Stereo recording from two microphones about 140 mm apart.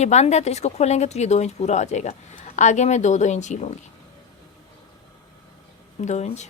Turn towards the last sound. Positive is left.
turn(degrees=55)  # may be behind; listen again after turning